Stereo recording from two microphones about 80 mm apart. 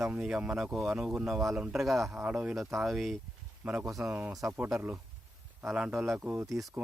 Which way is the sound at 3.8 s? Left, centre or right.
Right.